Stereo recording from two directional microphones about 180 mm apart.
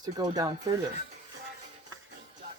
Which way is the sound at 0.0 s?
20° right (ahead or behind).